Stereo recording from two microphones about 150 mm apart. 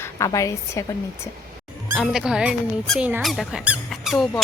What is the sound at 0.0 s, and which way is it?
Speech, 20° left (ahead or behind).